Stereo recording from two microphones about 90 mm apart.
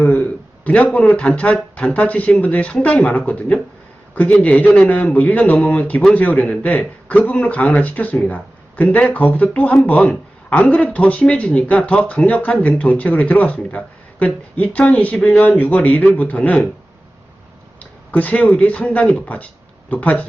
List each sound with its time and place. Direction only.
0.0 s a sound: 15° left (ahead or behind)
1.0 s speech: 10° left (ahead or behind)
18.1 s speech: 15° left (ahead or behind)